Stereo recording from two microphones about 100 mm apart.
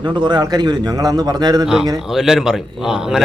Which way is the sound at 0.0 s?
50° right (ahead or behind).